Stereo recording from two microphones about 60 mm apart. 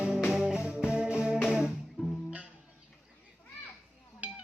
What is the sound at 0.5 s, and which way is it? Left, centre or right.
Music, centre.